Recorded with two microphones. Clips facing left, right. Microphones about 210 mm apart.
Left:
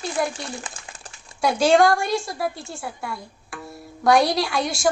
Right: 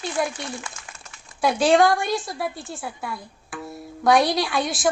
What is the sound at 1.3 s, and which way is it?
A woman's voice, centre (ahead or behind).